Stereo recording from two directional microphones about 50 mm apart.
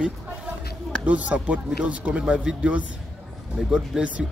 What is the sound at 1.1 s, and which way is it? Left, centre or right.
Speech, right.